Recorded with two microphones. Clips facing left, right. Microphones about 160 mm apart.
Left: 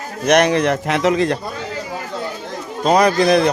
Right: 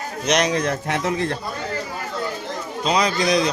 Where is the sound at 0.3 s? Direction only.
60° left (ahead or behind); by 1.4 s 90° left.